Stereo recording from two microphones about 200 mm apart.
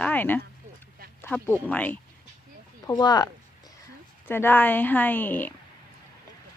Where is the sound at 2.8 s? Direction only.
20° left (ahead or behind).